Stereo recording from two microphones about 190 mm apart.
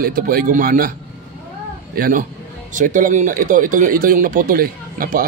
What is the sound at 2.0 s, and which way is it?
Speech, 50° right (ahead or behind).